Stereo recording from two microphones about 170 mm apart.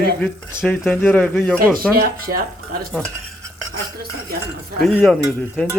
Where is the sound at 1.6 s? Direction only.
60° right (ahead or behind).